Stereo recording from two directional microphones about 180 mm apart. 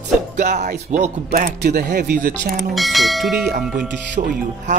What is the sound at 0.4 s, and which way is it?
Music, 45° right (ahead or behind).